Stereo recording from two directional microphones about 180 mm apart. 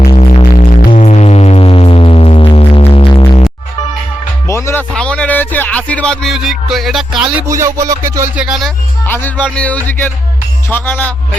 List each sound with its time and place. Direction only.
0.1 s music: 35° left (ahead or behind)
4.4 s music: 15° left (ahead or behind); by 7.4 s centre (ahead or behind)
7.6 s music: 15° right (ahead or behind)
8.4 s speech: centre (ahead or behind)
9.0 s speech: 10° left (ahead or behind)